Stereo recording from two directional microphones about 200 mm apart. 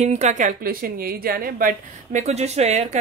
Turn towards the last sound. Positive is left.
turn(degrees=-35)  # may be behind; listen again after turning